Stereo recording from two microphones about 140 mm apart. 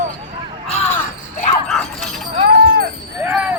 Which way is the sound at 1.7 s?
Centre (ahead or behind).